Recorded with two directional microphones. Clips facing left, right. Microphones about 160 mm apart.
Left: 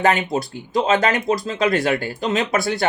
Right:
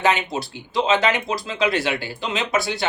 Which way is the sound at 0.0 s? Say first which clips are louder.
Left 3 dB; 50° left (ahead or behind).